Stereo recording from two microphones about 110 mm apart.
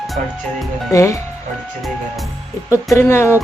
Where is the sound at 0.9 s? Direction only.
30° left (ahead or behind).